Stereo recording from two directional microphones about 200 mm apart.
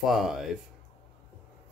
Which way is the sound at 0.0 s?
Centre (ahead or behind).